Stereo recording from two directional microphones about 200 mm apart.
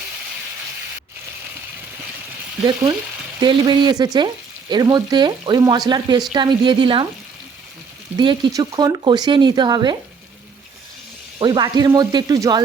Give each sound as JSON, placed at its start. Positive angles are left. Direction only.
{"t": 3.4, "sound": "speech", "side_deg": -25}
{"t": 8.2, "sound": "speech", "side_deg": -20}
{"t": 11.3, "sound": "speech", "side_deg": -20}